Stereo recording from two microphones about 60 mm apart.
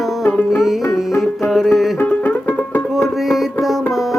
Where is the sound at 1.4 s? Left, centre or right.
Centre.